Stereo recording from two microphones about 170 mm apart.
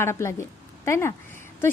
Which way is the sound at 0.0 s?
15° left (ahead or behind).